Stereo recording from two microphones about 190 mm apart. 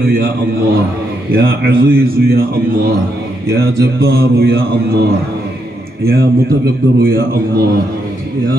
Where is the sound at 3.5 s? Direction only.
55° right (ahead or behind).